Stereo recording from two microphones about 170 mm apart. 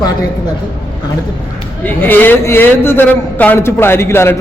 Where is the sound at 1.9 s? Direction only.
10° left (ahead or behind).